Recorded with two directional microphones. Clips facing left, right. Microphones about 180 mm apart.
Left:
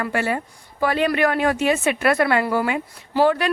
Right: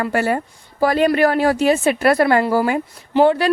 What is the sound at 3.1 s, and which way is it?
Speech, 25° right (ahead or behind).